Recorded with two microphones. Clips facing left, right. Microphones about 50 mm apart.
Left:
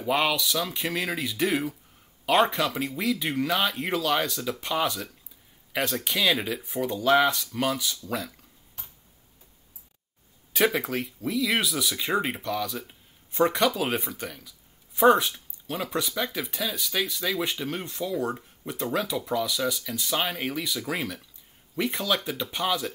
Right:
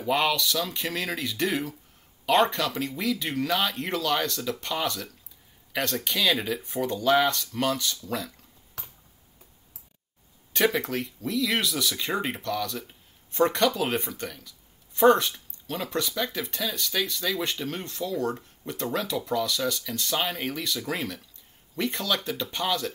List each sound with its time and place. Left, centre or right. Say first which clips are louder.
0.0 s speech: even; centre
8.8 s finger snapping: right 5 dB; right
10.5 s speech: even; centre